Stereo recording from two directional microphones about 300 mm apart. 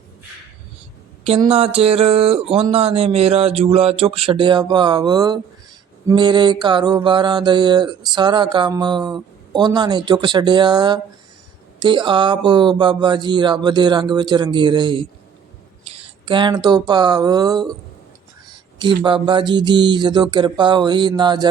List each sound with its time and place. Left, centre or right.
1.2 s a sound: centre
6.1 s mantra: centre
16.2 s mantra: centre
18.8 s mantra: centre